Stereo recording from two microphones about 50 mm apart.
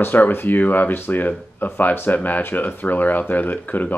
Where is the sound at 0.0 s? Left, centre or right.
Left.